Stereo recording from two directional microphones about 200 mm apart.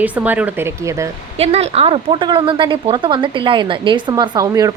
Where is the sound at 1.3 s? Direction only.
30° right (ahead or behind).